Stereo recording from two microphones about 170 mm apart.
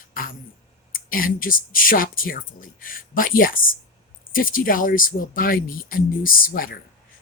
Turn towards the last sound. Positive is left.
turn(degrees=60)  # may be behind; listen again after turning